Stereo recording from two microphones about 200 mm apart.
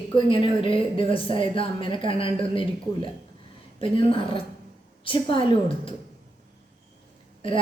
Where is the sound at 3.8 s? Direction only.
25° left (ahead or behind).